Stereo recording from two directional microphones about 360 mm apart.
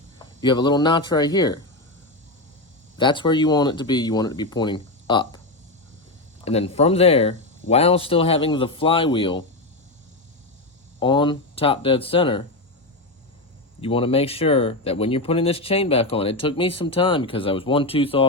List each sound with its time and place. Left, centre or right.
0.2 s speech: centre
3.0 s speech: centre
6.4 s speech: centre
11.0 s speech: centre
13.8 s speech: centre